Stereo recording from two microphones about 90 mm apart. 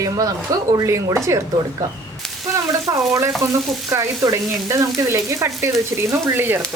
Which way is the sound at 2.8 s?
30° right (ahead or behind).